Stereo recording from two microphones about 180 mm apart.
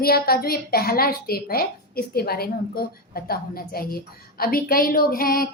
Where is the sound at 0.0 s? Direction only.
55° left (ahead or behind).